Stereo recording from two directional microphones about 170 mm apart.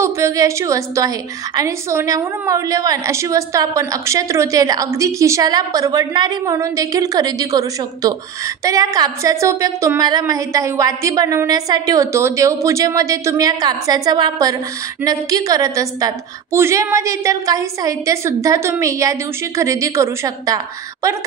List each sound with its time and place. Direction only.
0.0 s a woman's voice: 15° right (ahead or behind)